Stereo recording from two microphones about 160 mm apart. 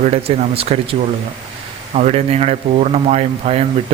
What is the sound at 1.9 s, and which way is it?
Speech, 40° right (ahead or behind).